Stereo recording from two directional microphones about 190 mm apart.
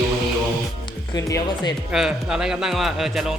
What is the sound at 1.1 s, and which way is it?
Speech, 20° left (ahead or behind).